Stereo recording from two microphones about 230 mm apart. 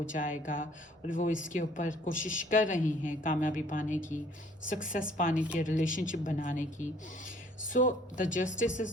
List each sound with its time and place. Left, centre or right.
0.0 s a woman's voice: left
5.3 s a woman's voice: centre
5.5 s a woman's voice: left